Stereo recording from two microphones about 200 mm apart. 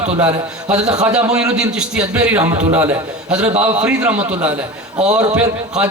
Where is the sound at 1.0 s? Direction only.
5° right (ahead or behind).